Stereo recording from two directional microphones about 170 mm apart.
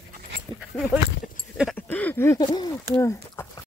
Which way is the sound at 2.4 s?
25° left (ahead or behind).